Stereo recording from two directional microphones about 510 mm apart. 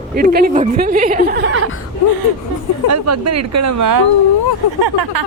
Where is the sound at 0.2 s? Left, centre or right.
Centre.